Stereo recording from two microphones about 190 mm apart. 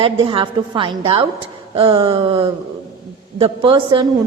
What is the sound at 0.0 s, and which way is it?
A woman's voice, 30° right (ahead or behind).